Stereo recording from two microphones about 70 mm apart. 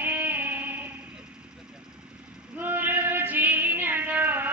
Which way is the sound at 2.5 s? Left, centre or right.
Right.